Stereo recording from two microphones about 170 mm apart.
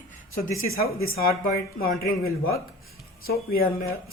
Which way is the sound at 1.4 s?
55° left (ahead or behind).